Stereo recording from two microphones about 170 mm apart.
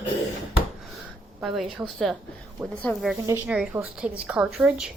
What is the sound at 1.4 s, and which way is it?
A woman's voice, centre (ahead or behind).